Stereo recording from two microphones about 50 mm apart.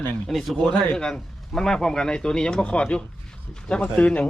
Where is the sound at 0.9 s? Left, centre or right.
Centre.